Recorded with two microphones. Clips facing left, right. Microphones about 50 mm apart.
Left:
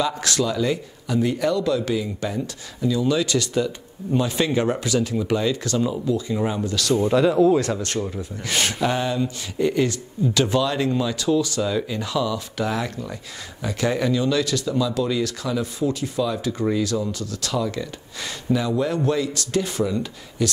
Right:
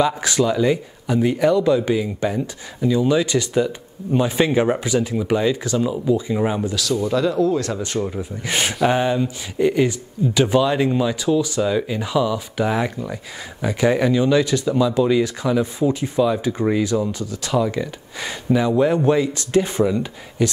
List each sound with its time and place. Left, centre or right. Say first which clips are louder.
0.0 s speech: right 4 dB; centre
7.1 s speech: left 3 dB; centre
7.8 s speech: right 3 dB; centre